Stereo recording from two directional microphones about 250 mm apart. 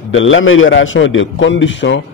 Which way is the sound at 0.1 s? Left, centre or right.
Left.